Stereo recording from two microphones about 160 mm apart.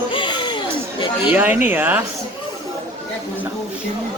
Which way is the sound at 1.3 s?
10° right (ahead or behind).